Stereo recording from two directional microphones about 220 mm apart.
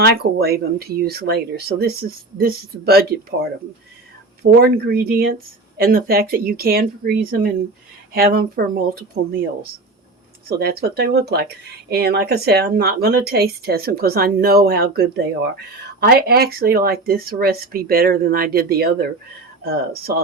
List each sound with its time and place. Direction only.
0.0 s speech: 45° right (ahead or behind)
4.6 s speech: 45° right (ahead or behind)
10.6 s speech: 45° right (ahead or behind)